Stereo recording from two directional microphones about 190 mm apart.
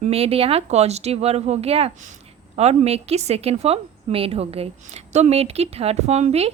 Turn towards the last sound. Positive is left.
turn(degrees=-35)  # may be behind; listen again after turning